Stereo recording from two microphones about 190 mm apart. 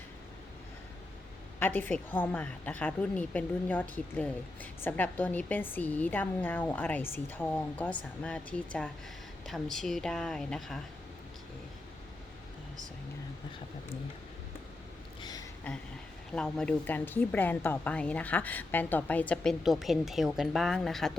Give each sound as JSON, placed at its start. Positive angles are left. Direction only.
{"t": 1.5, "sound": "a woman's voice", "side_deg": 10}
{"t": 15.2, "sound": "a sound", "side_deg": 20}
{"t": 16.3, "sound": "a woman's voice", "side_deg": 5}